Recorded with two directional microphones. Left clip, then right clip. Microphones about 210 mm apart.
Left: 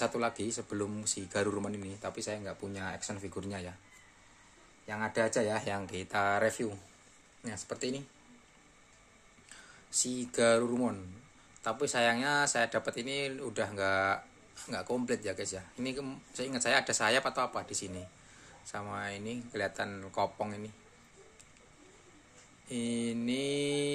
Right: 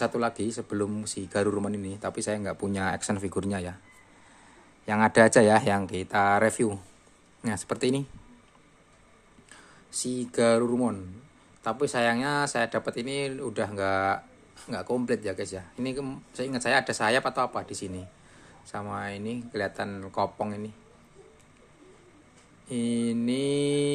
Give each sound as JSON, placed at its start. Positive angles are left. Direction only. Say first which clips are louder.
{"t": 0.0, "sound": "speech", "louder": "right 5 dB", "side_deg": -15}
{"t": 4.8, "sound": "speech", "louder": "right 12 dB", "side_deg": -40}
{"t": 9.5, "sound": "speech", "louder": "left 1 dB", "side_deg": -15}
{"t": 22.7, "sound": "speech", "louder": "right 6 dB", "side_deg": -15}